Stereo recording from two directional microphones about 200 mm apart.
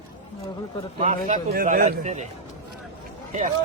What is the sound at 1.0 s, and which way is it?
Speech, 40° right (ahead or behind).